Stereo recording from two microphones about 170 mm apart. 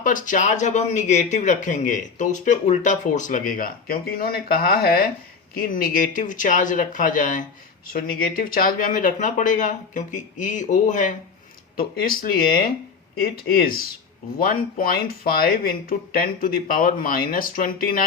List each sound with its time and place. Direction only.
0.0 s speech: 50° left (ahead or behind)
11.8 s speech: 60° left (ahead or behind)